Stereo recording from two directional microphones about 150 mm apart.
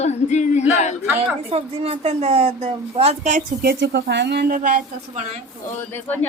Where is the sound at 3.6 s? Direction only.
90° right; by 5.2 s 65° right (ahead or behind).